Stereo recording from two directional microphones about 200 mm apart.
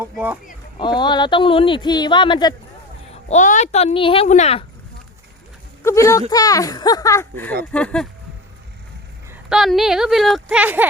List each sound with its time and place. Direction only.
0.0 s speech: 10° right (ahead or behind)
0.8 s speech: 20° left (ahead or behind)
3.1 s speech: 35° left (ahead or behind)
5.8 s speech: 15° left (ahead or behind)
9.5 s speech: centre (ahead or behind)